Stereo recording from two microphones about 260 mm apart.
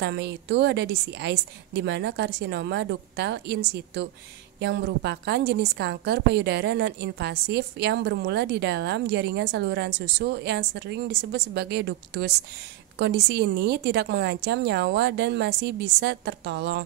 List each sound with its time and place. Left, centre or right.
0.0 s a woman's voice: right